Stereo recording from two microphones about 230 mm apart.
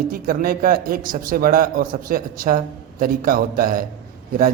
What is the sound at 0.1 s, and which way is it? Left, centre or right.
A man's voice, right.